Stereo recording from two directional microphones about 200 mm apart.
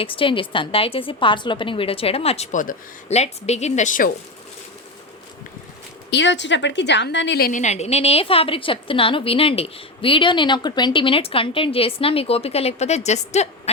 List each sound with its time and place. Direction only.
0.0 s a woman's voice: 25° left (ahead or behind)
6.1 s a woman's voice: 60° left (ahead or behind); by 13.5 s 35° left (ahead or behind)